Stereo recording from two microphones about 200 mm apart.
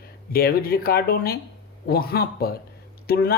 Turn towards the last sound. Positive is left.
turn(degrees=50)  # may be behind; listen again after turning